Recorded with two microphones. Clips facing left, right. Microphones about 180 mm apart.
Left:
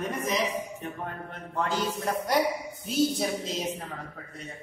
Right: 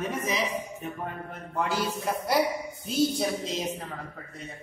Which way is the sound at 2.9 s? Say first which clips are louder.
Even; centre (ahead or behind).